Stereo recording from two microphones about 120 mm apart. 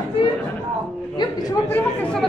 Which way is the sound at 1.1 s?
35° left (ahead or behind).